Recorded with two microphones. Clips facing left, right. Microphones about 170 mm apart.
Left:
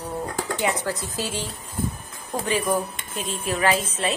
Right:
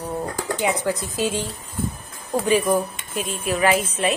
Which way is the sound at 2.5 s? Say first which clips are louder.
Right 4 dB; 10° right (ahead or behind).